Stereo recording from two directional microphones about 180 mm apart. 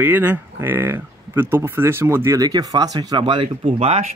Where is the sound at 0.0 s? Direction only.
10° right (ahead or behind).